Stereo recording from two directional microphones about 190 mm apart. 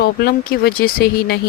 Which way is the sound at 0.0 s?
55° left (ahead or behind).